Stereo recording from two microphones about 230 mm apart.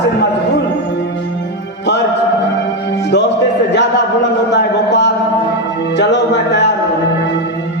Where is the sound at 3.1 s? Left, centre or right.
Left.